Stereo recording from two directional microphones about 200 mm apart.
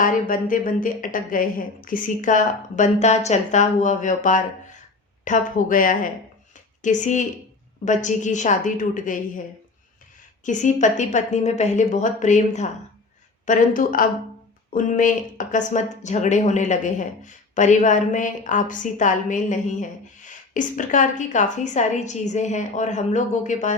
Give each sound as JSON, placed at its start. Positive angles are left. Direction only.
{"t": 0.0, "sound": "speech", "side_deg": 40}
{"t": 10.4, "sound": "speech", "side_deg": 40}